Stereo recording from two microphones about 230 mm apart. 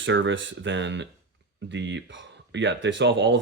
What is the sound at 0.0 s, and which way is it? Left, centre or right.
Speech, right.